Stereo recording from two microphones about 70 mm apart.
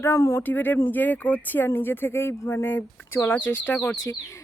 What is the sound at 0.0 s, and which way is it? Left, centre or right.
Speech, left.